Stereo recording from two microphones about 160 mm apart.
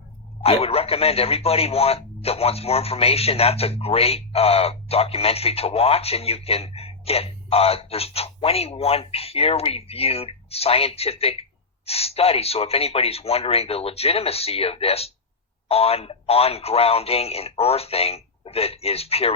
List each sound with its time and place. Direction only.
0.4 s speech: 40° left (ahead or behind)